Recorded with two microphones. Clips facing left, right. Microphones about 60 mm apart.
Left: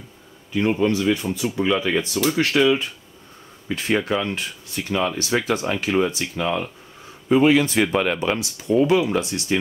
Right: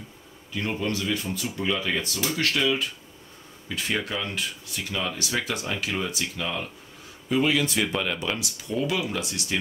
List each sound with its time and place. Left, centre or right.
0.6 s speech: left